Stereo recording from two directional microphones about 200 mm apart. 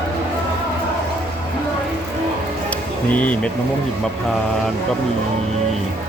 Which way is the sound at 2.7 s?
5° left (ahead or behind).